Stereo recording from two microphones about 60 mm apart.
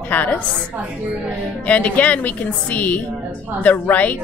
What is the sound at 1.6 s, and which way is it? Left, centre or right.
A woman's voice, left.